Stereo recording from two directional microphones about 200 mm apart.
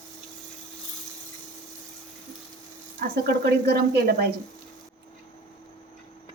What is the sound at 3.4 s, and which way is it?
Speech, 55° right (ahead or behind).